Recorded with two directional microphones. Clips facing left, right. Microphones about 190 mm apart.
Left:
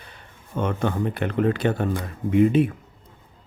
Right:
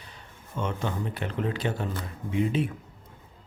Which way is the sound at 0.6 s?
55° left (ahead or behind).